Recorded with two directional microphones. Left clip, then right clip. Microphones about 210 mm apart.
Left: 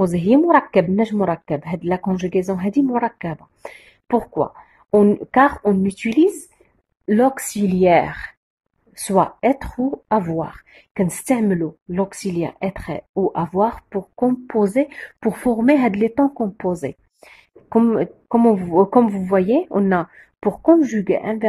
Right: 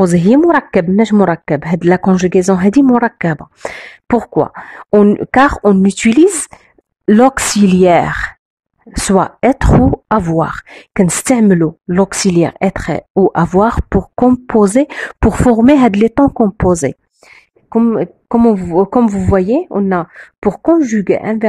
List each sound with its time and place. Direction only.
0.0 s a woman's voice: 40° right (ahead or behind)
17.6 s a woman's voice: 15° right (ahead or behind)
20.2 s a woman's voice: 30° right (ahead or behind)